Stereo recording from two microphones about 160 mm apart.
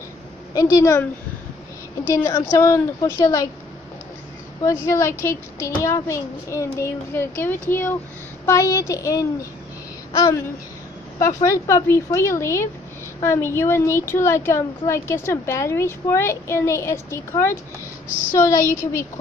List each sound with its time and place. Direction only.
0.6 s a woman's voice: 20° left (ahead or behind)
2.2 s a woman's voice: 20° left (ahead or behind)
4.9 s a woman's voice: 15° left (ahead or behind)